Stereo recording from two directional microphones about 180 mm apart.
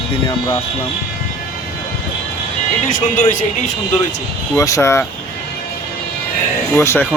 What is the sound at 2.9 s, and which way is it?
Speech, 45° left (ahead or behind).